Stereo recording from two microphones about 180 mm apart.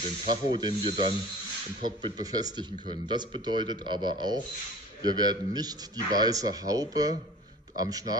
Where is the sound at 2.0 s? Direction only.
20° right (ahead or behind).